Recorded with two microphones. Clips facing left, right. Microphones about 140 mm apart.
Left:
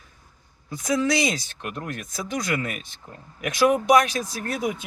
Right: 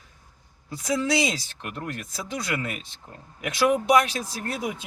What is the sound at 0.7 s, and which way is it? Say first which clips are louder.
Speech: left 2 dB; 30° right (ahead or behind).